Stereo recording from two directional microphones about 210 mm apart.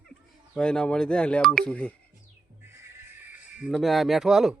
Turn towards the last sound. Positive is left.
turn(degrees=-5)  # may be behind; listen again after turning